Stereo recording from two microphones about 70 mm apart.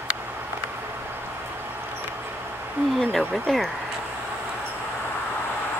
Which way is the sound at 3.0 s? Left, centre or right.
Centre.